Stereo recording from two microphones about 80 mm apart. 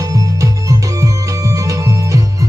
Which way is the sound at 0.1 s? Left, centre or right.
Right.